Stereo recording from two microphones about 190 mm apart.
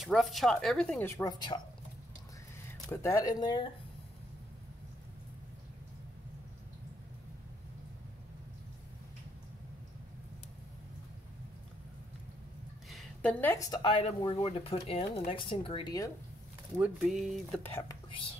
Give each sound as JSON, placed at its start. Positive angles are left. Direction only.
{"t": 0.0, "sound": "speech", "side_deg": 0}
{"t": 2.9, "sound": "speech", "side_deg": 15}
{"t": 12.9, "sound": "speech", "side_deg": 5}
{"t": 16.8, "sound": "speech", "side_deg": 0}